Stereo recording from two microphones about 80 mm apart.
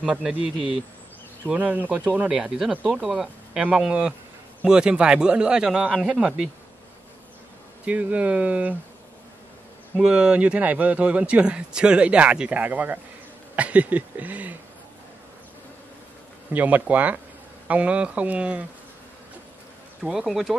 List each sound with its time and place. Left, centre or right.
0.0 s a man's voice: centre
1.5 s a sound: centre
2.2 s a man's voice: centre
7.8 s a man's voice: centre
9.9 s a man's voice: centre
13.6 s a sound: centre
16.5 s a sound: centre
17.6 s a man's voice: centre
20.0 s speech: centre